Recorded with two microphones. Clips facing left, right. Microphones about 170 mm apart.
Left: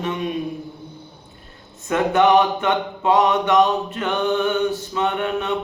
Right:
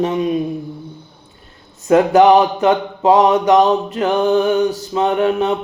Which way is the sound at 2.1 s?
40° right (ahead or behind).